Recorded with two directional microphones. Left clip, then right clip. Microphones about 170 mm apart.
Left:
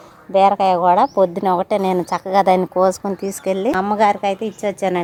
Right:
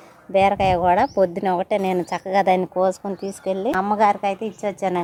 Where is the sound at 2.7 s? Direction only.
20° left (ahead or behind).